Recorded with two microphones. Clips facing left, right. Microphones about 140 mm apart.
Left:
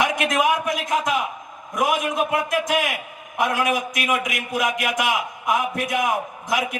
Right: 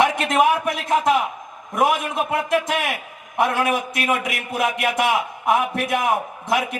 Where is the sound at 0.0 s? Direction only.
30° right (ahead or behind).